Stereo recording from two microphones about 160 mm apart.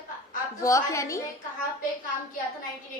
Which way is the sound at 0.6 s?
20° left (ahead or behind).